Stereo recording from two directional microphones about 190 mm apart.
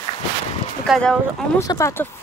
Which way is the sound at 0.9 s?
5° left (ahead or behind).